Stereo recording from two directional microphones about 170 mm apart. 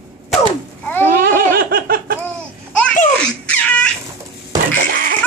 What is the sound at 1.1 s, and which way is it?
Laughter, 60° right (ahead or behind).